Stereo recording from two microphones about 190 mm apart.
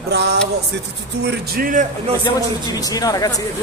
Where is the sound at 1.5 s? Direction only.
45° right (ahead or behind).